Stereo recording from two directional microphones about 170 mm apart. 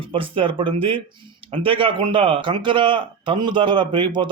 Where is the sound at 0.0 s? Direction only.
30° right (ahead or behind).